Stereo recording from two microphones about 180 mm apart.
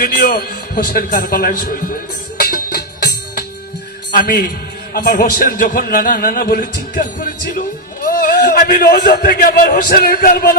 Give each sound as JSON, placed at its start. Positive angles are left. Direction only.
{"t": 0.0, "sound": "music", "side_deg": 55}
{"t": 0.9, "sound": "a man's voice", "side_deg": 55}
{"t": 2.4, "sound": "music", "side_deg": 55}
{"t": 4.1, "sound": "a man's voice", "side_deg": 55}